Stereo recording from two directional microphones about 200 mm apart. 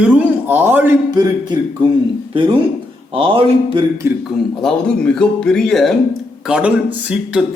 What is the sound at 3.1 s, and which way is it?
Speech, 25° right (ahead or behind).